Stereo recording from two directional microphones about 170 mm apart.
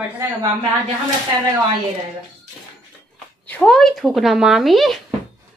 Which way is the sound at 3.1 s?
10° left (ahead or behind).